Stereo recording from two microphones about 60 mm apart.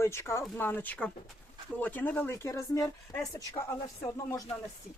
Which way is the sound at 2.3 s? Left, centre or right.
Left.